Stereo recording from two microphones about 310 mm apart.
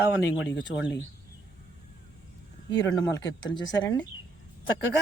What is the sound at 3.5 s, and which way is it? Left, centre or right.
Speech, centre.